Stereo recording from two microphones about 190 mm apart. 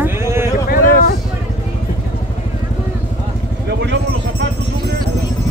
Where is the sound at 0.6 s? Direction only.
50° left (ahead or behind).